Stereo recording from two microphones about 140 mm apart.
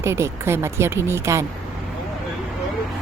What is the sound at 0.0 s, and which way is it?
Speech, 20° right (ahead or behind).